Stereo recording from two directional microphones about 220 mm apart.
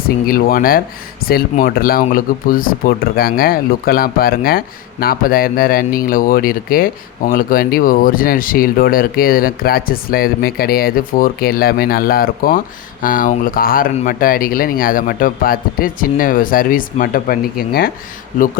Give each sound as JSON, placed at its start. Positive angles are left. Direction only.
{"t": 0.0, "sound": "speech", "side_deg": 40}